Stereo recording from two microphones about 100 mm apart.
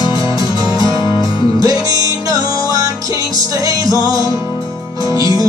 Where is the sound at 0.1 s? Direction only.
40° right (ahead or behind).